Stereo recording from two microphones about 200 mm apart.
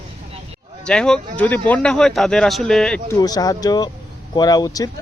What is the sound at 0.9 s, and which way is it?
Speech, 5° left (ahead or behind).